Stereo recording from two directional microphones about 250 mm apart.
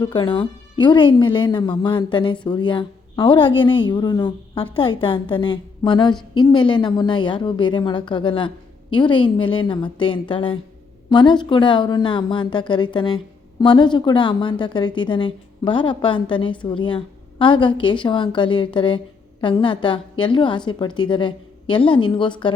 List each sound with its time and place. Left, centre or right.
0.0 s speech: centre